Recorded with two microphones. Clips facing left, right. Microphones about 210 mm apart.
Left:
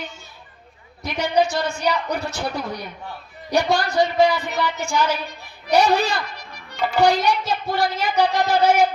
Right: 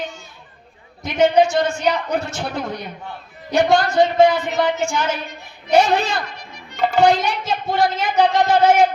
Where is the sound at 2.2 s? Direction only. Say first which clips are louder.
Right 1 dB; 20° right (ahead or behind).